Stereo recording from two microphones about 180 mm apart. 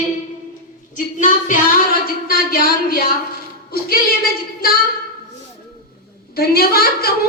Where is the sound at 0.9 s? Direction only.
45° left (ahead or behind).